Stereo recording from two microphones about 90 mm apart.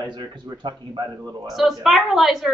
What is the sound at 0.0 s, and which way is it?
Speech, 50° right (ahead or behind).